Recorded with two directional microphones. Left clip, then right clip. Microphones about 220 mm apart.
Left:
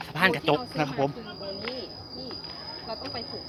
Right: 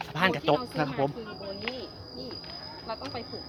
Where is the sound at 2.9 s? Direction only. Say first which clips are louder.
Even; 25° right (ahead or behind).